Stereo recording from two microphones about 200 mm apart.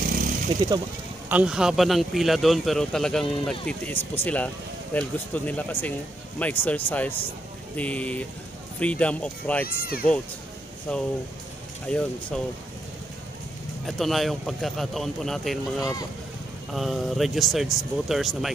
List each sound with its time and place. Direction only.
0.0 s a sound: 45° right (ahead or behind)
1.3 s speech: 5° right (ahead or behind)
9.7 s speech: 50° left (ahead or behind)
10.9 s speech: 5° left (ahead or behind)
13.8 s speech: centre (ahead or behind)
15.8 s speech: 20° left (ahead or behind)
16.7 s speech: centre (ahead or behind)